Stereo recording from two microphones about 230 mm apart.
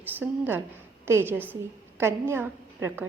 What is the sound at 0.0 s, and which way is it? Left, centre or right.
A woman's voice, centre.